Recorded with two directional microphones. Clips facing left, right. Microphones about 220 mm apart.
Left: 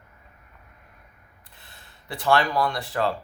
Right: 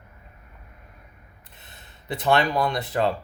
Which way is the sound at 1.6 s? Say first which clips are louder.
Right 2 dB; 20° right (ahead or behind).